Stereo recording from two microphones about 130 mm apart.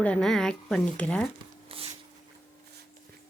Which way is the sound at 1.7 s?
45° right (ahead or behind).